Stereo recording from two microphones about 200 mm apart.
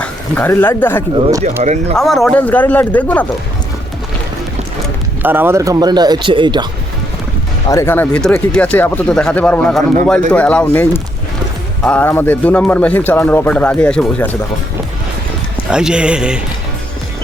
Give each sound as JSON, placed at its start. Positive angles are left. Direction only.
{"t": 0.0, "sound": "speech", "side_deg": 10}
{"t": 1.6, "sound": "speech", "side_deg": -35}
{"t": 2.0, "sound": "a man's voice", "side_deg": 0}
{"t": 5.2, "sound": "speech", "side_deg": -10}
{"t": 7.7, "sound": "a man's voice", "side_deg": 15}
{"t": 15.7, "sound": "speech", "side_deg": -5}